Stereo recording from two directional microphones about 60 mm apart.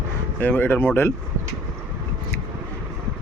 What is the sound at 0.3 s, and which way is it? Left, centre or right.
Speech, left.